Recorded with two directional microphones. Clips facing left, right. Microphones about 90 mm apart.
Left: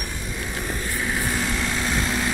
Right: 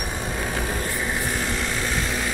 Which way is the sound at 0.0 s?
45° right (ahead or behind).